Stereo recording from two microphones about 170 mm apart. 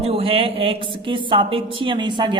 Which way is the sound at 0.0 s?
35° right (ahead or behind).